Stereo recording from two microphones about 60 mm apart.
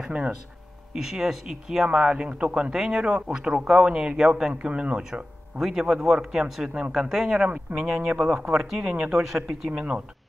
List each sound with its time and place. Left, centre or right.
0.0 s speech: centre
7.3 s speech: centre
7.7 s speech: centre
9.7 s speech: centre